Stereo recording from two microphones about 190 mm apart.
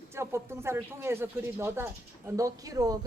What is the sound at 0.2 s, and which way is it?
Speech, 15° right (ahead or behind).